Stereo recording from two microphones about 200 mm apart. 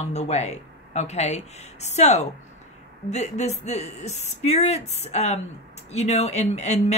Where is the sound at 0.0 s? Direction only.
35° left (ahead or behind).